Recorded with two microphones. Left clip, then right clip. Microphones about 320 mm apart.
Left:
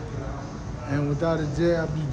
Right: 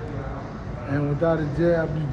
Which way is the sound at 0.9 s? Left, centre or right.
Centre.